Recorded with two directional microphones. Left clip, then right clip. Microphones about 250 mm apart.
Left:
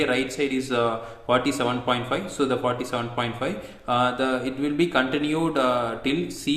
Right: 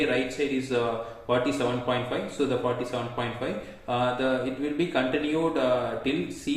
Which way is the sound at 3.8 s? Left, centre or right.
Left.